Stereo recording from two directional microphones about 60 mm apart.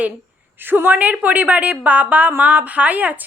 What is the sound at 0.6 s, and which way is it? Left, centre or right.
A woman's voice, right.